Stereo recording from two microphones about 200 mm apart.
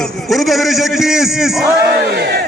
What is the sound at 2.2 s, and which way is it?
Crowd, 55° right (ahead or behind).